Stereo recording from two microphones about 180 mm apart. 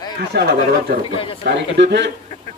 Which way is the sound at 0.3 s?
65° right (ahead or behind).